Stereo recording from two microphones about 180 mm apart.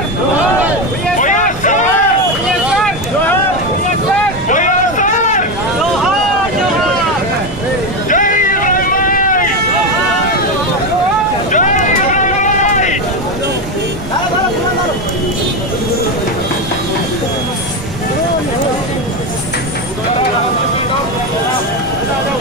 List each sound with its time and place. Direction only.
1.1 s vehicle: 45° left (ahead or behind)
4.5 s a sound: 45° left (ahead or behind)
8.1 s vehicle: 45° left (ahead or behind)
11.5 s vehicle: 45° left (ahead or behind)